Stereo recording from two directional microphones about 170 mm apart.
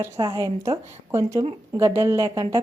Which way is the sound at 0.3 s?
20° right (ahead or behind).